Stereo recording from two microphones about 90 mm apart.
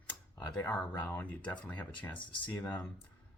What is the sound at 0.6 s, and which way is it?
Speech, 25° left (ahead or behind).